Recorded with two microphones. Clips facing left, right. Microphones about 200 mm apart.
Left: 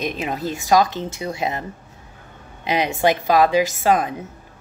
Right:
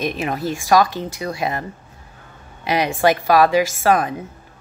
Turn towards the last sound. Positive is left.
turn(degrees=20)  # may be behind; listen again after turning